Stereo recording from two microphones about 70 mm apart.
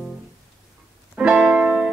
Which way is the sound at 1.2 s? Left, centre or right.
Centre.